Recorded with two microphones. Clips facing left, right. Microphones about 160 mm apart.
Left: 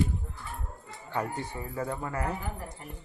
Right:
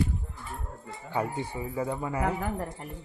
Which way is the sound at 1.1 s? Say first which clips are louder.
Right 2 dB; 10° right (ahead or behind).